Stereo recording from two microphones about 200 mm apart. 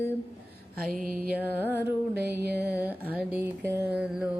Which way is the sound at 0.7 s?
45° right (ahead or behind).